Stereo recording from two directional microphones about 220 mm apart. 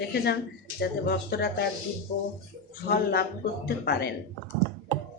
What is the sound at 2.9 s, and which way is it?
Speech, 45° left (ahead or behind).